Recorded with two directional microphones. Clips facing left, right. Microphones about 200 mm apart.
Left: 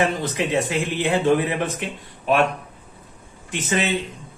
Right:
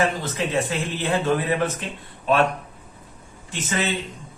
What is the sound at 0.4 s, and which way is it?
A man's voice, 20° left (ahead or behind).